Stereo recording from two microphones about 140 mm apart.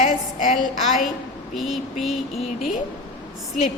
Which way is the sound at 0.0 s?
70° left (ahead or behind).